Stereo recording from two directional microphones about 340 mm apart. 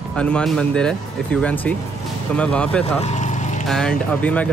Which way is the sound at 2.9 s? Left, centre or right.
Centre.